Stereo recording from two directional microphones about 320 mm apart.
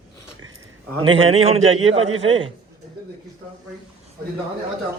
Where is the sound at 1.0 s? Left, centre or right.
Centre.